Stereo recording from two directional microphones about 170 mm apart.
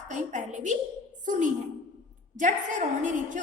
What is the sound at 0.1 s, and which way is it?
A woman's voice, 45° right (ahead or behind).